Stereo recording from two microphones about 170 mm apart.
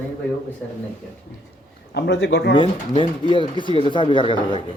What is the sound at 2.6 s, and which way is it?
Speech, 30° left (ahead or behind).